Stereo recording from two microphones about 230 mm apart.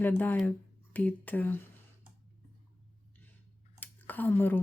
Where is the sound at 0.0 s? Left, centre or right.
Centre.